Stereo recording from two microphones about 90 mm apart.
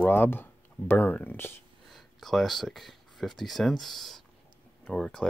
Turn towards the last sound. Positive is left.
turn(degrees=5)  # may be behind; listen again after turning